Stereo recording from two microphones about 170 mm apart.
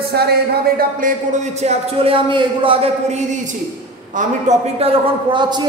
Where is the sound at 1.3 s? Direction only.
40° right (ahead or behind); by 5.7 s 25° right (ahead or behind).